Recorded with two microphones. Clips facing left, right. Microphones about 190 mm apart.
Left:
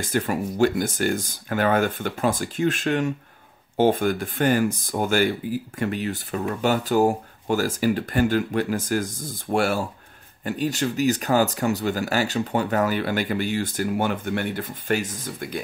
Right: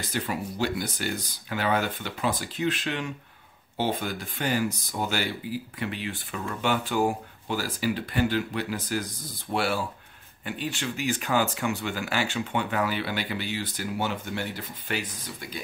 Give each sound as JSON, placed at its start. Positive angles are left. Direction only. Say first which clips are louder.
{"t": 0.0, "sound": "speech", "louder": "left 6 dB", "side_deg": 50}